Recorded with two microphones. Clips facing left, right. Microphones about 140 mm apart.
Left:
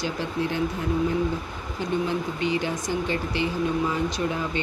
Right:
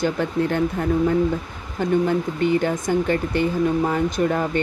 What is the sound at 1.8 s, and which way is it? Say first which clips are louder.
Speech: right 6 dB; 50° right (ahead or behind).